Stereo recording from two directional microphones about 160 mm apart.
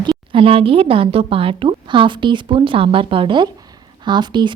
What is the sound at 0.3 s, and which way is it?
A woman's voice, 35° right (ahead or behind).